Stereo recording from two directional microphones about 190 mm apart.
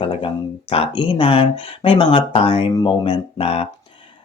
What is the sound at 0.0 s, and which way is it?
Speech, 30° left (ahead or behind).